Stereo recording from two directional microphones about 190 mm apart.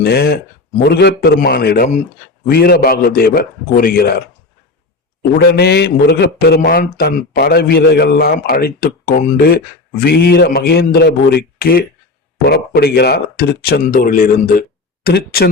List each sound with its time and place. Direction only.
0.0 s a man's voice: 55° left (ahead or behind)
5.4 s a man's voice: 55° left (ahead or behind)